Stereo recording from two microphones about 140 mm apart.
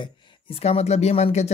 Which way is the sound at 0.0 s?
35° left (ahead or behind).